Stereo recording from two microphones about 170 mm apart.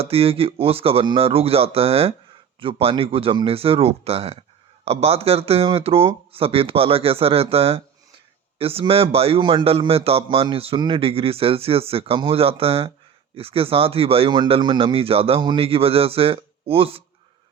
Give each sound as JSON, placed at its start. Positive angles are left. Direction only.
{"t": 0.0, "sound": "a man's voice", "side_deg": -35}